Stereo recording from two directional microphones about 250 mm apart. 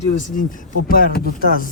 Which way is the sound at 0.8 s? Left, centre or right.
Left.